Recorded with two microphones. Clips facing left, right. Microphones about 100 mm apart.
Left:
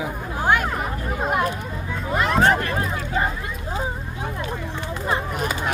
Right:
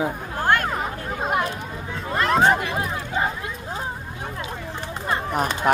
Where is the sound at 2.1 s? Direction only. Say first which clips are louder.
Even; 5° left (ahead or behind).